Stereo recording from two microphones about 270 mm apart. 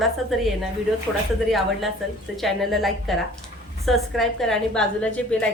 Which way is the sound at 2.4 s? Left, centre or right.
Centre.